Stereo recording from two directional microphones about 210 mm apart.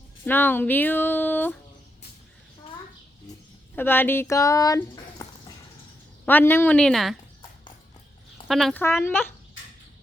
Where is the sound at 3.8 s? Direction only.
10° left (ahead or behind).